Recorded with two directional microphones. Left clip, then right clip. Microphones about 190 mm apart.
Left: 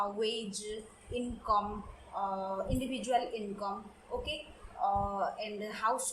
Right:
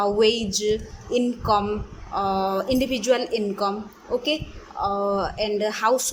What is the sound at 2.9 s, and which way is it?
Speech, 60° right (ahead or behind).